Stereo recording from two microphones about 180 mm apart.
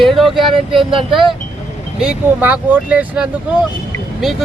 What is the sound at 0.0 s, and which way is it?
Speech, centre (ahead or behind).